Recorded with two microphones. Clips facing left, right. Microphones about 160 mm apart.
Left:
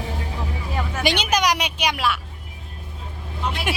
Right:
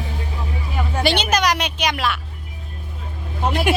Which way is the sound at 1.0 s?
15° left (ahead or behind).